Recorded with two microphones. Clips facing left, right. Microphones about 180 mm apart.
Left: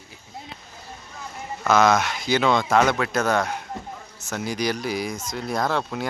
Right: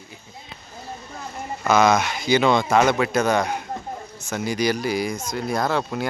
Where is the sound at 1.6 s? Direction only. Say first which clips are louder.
Right 1 dB; centre (ahead or behind).